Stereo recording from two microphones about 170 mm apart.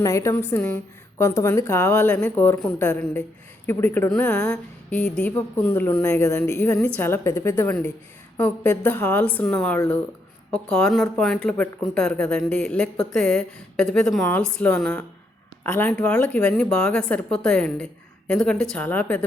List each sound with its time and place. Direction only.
0.0 s a woman's voice: 20° left (ahead or behind)